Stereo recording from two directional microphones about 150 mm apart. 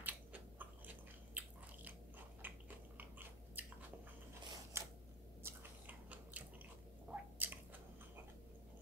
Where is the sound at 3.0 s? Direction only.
15° right (ahead or behind).